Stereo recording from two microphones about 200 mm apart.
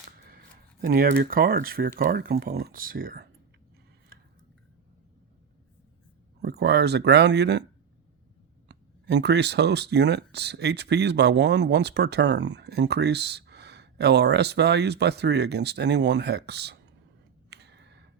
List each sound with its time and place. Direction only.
0.8 s speech: 50° right (ahead or behind)
6.4 s speech: 55° right (ahead or behind)
8.6 s speech: 60° right (ahead or behind)
17.5 s a sound: 55° right (ahead or behind)